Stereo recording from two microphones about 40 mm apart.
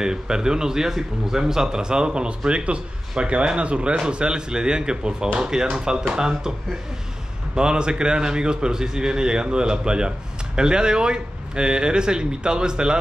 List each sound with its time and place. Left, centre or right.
0.0 s a man's voice: centre
7.5 s a man's voice: right